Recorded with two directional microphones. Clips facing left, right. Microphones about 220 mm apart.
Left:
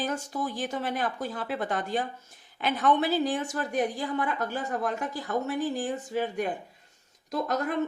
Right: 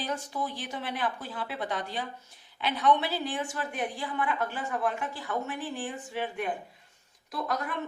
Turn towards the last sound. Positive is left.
turn(degrees=40)  # may be behind; listen again after turning